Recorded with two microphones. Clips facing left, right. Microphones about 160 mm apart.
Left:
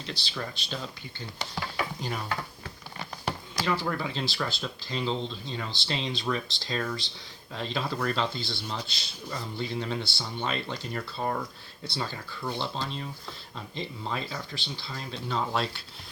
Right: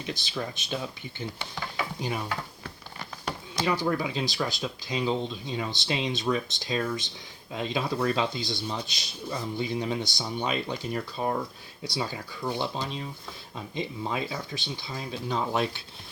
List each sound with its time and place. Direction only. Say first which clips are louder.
0.0 s speech: right 3 dB; 15° right (ahead or behind)
3.5 s a sound: right 2 dB; 20° right (ahead or behind)
3.8 s speech: right 3 dB; 15° right (ahead or behind)